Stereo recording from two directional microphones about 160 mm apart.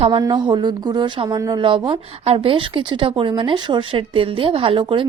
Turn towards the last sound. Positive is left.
turn(degrees=-35)  # may be behind; listen again after turning